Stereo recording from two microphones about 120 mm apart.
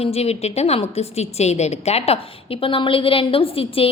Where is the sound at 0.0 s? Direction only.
60° left (ahead or behind).